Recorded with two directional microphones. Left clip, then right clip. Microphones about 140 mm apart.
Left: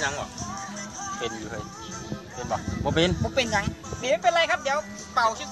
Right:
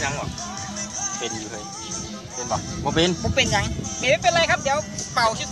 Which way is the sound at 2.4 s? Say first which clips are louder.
Right 2 dB; 35° left (ahead or behind).